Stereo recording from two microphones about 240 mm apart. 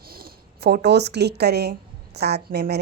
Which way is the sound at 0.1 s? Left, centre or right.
Right.